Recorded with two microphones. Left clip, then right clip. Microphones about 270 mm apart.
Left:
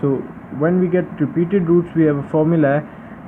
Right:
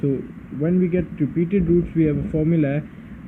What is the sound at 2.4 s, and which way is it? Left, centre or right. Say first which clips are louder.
Speech: left 7 dB; left.